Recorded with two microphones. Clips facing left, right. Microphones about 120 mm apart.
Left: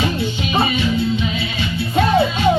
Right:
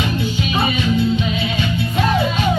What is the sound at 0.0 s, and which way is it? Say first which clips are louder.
Music: even; 35° left (ahead or behind).